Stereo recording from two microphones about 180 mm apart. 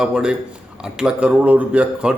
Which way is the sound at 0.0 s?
5° right (ahead or behind).